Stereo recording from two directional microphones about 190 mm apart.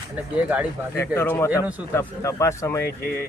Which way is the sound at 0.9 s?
10° left (ahead or behind).